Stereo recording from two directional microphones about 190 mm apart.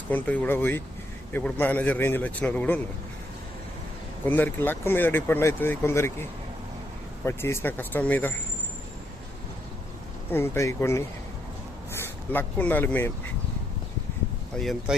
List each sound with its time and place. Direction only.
0.1 s speech: 10° left (ahead or behind)
4.3 s speech: 10° left (ahead or behind)
7.3 s speech: 15° left (ahead or behind)
10.3 s speech: 10° left (ahead or behind)
12.3 s speech: 10° left (ahead or behind)
14.5 s speech: centre (ahead or behind)